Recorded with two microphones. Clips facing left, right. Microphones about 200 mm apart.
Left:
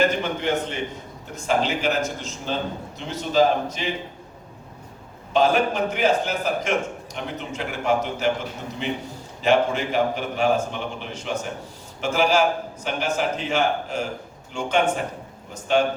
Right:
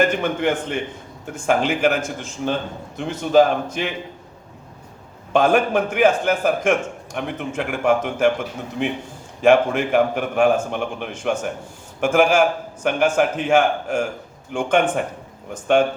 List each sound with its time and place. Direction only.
0.0 s a man's voice: 50° right (ahead or behind)
5.3 s a man's voice: 50° right (ahead or behind)
9.4 s a man's voice: 50° right (ahead or behind)